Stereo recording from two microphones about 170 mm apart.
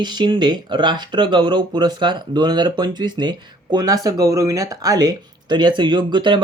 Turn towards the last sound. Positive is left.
turn(degrees=-30)  # may be behind; listen again after turning